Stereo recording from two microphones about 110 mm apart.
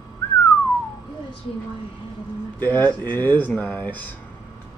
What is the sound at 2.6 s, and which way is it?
Speech, 15° left (ahead or behind).